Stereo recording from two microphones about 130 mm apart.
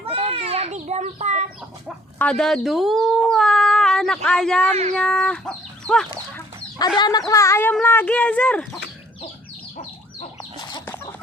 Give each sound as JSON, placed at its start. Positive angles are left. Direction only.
{"t": 0.0, "sound": "children playing", "side_deg": -50}
{"t": 2.1, "sound": "speech", "side_deg": 5}
{"t": 4.7, "sound": "speech", "side_deg": -55}
{"t": 4.9, "sound": "speech", "side_deg": 5}
{"t": 6.7, "sound": "speech", "side_deg": 35}
{"t": 10.6, "sound": "chicken", "side_deg": 35}
{"t": 10.8, "sound": "chicken", "side_deg": 15}